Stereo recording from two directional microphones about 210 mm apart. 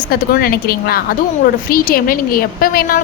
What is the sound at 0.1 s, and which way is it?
A woman's voice, 45° left (ahead or behind).